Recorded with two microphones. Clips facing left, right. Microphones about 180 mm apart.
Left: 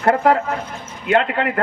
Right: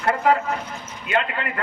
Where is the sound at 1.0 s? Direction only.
65° left (ahead or behind).